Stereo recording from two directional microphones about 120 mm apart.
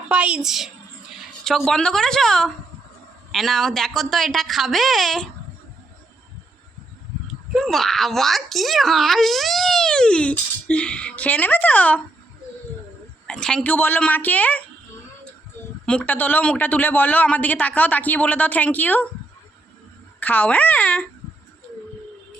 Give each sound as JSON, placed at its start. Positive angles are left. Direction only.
{"t": 0.1, "sound": "a woman's voice", "side_deg": -10}
{"t": 7.5, "sound": "a child's voice", "side_deg": 0}
{"t": 13.2, "sound": "speech", "side_deg": 5}
{"t": 15.9, "sound": "speech", "side_deg": 10}
{"t": 20.1, "sound": "speech", "side_deg": 15}